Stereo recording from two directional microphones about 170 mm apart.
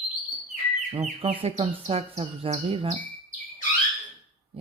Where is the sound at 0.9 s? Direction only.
35° right (ahead or behind).